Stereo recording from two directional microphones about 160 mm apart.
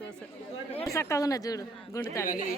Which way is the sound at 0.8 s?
20° left (ahead or behind).